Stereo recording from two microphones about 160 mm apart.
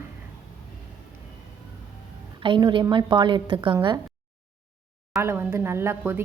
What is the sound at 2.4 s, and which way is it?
A woman's voice, 30° right (ahead or behind).